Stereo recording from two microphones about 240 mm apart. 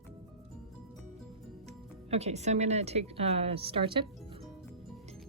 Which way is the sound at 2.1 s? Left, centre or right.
Right.